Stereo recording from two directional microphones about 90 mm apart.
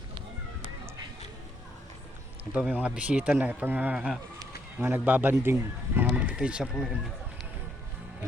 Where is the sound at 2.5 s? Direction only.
15° right (ahead or behind).